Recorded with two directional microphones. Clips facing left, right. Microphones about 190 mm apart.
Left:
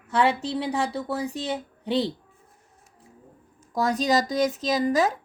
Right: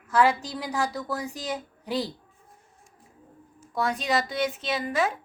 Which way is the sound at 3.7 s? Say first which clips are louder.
Left 4 dB; 40° left (ahead or behind).